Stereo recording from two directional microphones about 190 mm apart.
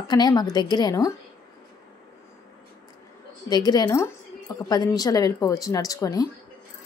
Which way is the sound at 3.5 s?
20° left (ahead or behind).